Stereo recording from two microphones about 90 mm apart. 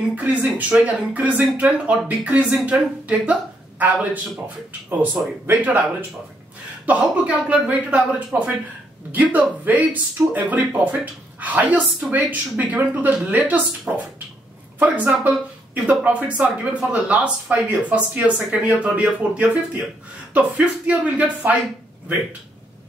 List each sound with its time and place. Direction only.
0.1 s a woman's voice: 15° right (ahead or behind)
5.5 s a woman's voice: 20° right (ahead or behind)